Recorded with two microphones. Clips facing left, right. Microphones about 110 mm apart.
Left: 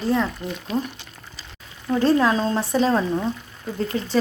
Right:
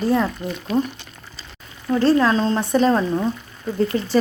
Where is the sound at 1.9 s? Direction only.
10° left (ahead or behind).